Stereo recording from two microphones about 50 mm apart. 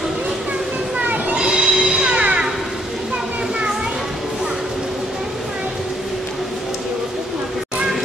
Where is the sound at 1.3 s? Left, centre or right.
Centre.